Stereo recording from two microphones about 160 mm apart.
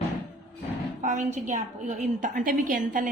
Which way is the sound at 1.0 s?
50° right (ahead or behind).